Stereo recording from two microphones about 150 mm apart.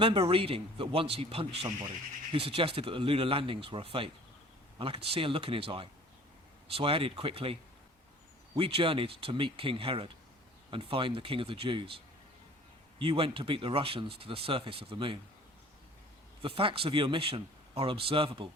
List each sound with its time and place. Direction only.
0.0 s speech: 35° right (ahead or behind)
8.5 s speech: 40° right (ahead or behind)
13.0 s speech: 40° right (ahead or behind)
16.4 s speech: 35° right (ahead or behind)